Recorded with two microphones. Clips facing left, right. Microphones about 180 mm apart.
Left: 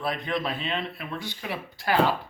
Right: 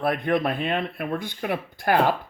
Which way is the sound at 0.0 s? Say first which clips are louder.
Right 6 dB; 55° right (ahead or behind).